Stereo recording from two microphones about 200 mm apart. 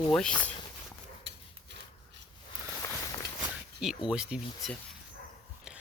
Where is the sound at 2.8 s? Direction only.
20° left (ahead or behind).